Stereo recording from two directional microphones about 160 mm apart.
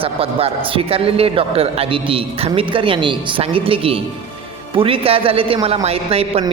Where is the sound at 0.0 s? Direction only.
35° right (ahead or behind).